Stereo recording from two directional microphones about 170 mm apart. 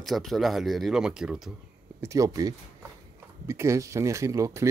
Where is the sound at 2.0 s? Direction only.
20° right (ahead or behind).